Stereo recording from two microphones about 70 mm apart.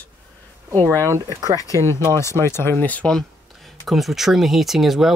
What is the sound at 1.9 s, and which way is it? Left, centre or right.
Speech, left.